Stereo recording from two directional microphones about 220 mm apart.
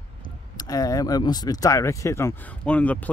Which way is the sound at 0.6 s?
15° left (ahead or behind).